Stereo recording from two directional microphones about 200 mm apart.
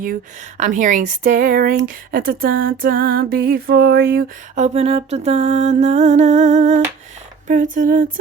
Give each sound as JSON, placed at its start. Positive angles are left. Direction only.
{"t": 0.0, "sound": "mantra", "side_deg": -40}
{"t": 2.1, "sound": "female singing", "side_deg": -45}
{"t": 4.5, "sound": "mantra", "side_deg": -35}